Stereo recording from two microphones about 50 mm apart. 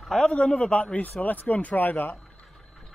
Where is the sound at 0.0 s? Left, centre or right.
Centre.